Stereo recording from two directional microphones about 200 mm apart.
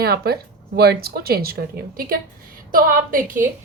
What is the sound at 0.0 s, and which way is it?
A woman's voice, 50° right (ahead or behind).